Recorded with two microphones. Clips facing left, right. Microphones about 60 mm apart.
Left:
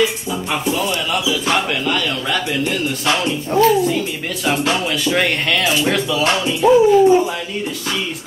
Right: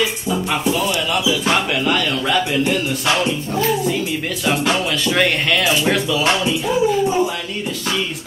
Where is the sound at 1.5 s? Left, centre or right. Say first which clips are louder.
Even; centre.